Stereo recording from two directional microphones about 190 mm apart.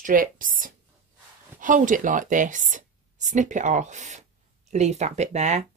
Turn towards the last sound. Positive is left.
turn(degrees=-35)  # may be behind; listen again after turning